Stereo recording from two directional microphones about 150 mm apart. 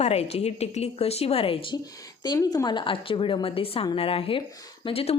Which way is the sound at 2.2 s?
25° left (ahead or behind).